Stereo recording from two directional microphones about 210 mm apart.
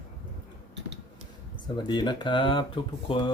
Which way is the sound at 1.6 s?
20° left (ahead or behind).